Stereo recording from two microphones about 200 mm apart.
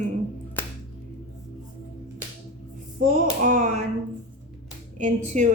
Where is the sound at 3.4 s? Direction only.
40° right (ahead or behind).